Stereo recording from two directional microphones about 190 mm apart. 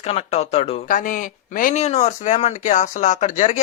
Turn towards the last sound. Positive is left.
turn(degrees=40)  # may be behind; listen again after turning